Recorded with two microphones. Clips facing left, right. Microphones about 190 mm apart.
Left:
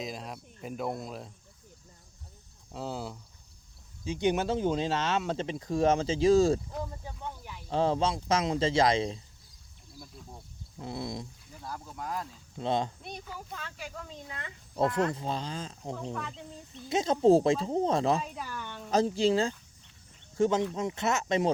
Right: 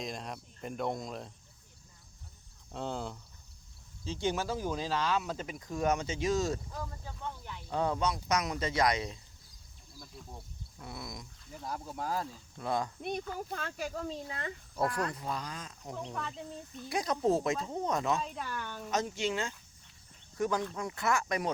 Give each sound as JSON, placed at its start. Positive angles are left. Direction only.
{"t": 0.0, "sound": "speech", "side_deg": 0}
{"t": 2.7, "sound": "speech", "side_deg": 5}
{"t": 4.0, "sound": "speech", "side_deg": 15}
{"t": 7.0, "sound": "snake", "side_deg": 15}
{"t": 7.7, "sound": "speech", "side_deg": 25}
{"t": 10.8, "sound": "speech", "side_deg": 25}
{"t": 11.9, "sound": "speech", "side_deg": -30}
{"t": 12.5, "sound": "speech", "side_deg": 25}
{"t": 13.0, "sound": "speech", "side_deg": -50}
{"t": 14.8, "sound": "speech", "side_deg": 25}
{"t": 18.2, "sound": "speech", "side_deg": 5}
{"t": 18.9, "sound": "speech", "side_deg": 30}